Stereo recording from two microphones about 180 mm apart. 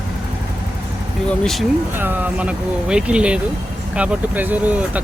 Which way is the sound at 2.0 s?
10° right (ahead or behind).